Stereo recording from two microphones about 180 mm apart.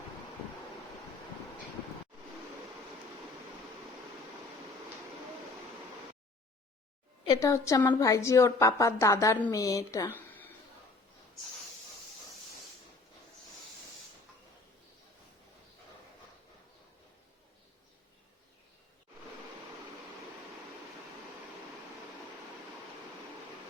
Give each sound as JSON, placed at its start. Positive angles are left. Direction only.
{"t": 7.3, "sound": "a woman's voice", "side_deg": 15}